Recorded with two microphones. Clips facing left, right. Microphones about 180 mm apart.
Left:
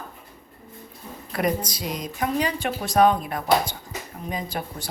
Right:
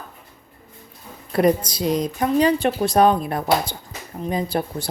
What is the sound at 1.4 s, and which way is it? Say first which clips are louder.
A woman's voice: right 7 dB; 30° right (ahead or behind).